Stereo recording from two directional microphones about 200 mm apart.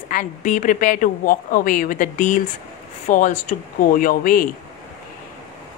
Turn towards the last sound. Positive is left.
turn(degrees=45)  # may be behind; listen again after turning